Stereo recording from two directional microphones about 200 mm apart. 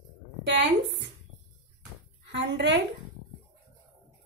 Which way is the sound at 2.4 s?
60° right (ahead or behind).